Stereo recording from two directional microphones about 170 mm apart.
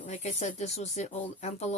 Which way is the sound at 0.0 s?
40° left (ahead or behind).